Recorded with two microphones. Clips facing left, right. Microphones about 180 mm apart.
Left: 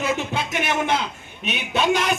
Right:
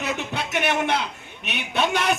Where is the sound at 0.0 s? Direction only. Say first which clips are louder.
Left 3 dB; 65° right (ahead or behind).